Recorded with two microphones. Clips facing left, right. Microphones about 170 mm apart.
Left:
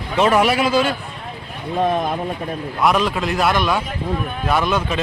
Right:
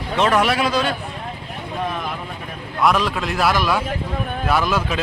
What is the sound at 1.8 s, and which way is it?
Speech, 50° left (ahead or behind).